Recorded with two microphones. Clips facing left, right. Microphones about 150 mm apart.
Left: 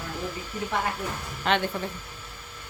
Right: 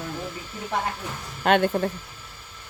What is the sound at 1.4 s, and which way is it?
Speech, 50° right (ahead or behind).